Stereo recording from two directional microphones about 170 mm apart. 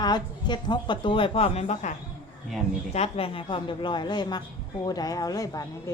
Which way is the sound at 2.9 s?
35° left (ahead or behind).